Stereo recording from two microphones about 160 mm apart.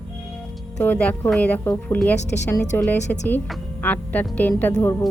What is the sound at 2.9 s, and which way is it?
Speech, 45° left (ahead or behind).